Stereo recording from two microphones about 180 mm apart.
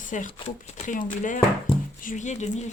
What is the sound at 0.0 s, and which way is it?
Speech, 45° left (ahead or behind).